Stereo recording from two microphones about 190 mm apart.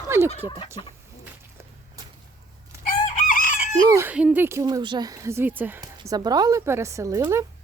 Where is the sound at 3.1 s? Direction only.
45° left (ahead or behind).